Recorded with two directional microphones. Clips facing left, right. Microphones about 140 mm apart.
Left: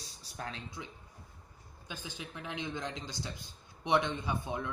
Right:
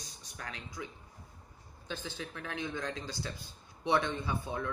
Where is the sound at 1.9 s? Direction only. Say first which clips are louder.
Right 4 dB; 15° left (ahead or behind).